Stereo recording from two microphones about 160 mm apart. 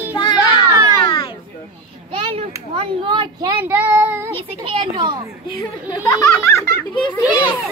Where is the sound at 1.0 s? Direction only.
30° left (ahead or behind).